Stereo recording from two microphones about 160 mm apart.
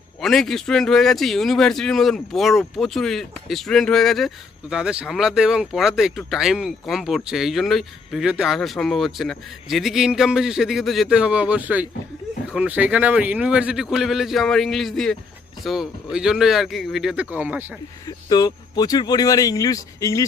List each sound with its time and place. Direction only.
0.2 s speech: centre (ahead or behind)
18.0 s speech: 25° left (ahead or behind)